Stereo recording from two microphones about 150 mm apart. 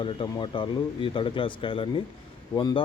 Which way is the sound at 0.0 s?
35° left (ahead or behind).